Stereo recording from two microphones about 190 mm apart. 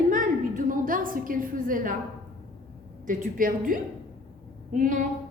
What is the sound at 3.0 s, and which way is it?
A woman's voice, 45° right (ahead or behind).